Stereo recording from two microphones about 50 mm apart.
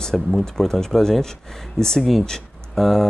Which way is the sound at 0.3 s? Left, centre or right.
Centre.